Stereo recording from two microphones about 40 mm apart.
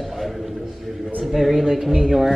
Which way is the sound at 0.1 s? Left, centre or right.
Centre.